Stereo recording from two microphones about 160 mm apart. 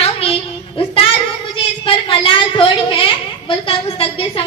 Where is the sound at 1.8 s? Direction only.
35° left (ahead or behind).